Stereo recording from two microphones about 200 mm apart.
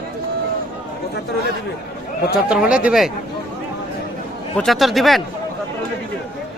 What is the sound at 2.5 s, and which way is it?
Speech, 5° right (ahead or behind).